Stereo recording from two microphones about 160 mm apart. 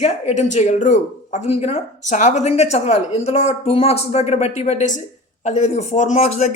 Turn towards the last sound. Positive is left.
turn(degrees=45)  # may be behind; listen again after turning